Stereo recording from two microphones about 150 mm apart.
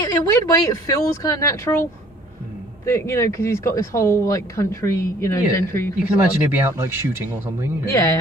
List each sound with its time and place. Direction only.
0.0 s speech: 20° left (ahead or behind)
6.5 s speech: 15° right (ahead or behind)
7.8 s speech: 20° left (ahead or behind)